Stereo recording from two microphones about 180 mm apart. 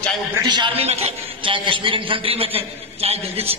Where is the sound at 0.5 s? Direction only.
25° right (ahead or behind).